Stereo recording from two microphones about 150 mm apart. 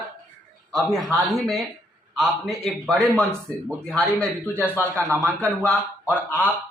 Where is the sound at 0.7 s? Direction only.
Centre (ahead or behind).